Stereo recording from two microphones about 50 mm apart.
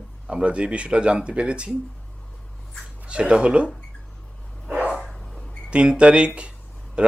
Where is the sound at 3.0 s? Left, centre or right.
Right.